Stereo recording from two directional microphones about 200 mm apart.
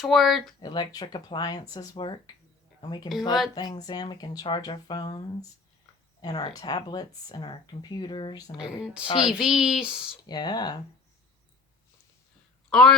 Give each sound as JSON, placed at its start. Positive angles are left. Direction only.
{"t": 0.0, "sound": "speech", "side_deg": 0}
{"t": 0.6, "sound": "speech", "side_deg": 20}
{"t": 8.5, "sound": "speech", "side_deg": -5}
{"t": 10.2, "sound": "speech", "side_deg": 20}
{"t": 12.7, "sound": "speech", "side_deg": 0}